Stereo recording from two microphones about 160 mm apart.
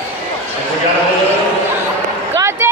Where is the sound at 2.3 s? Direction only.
15° right (ahead or behind).